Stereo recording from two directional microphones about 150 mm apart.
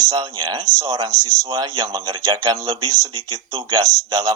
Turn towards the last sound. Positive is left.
turn(degrees=-25)  # may be behind; listen again after turning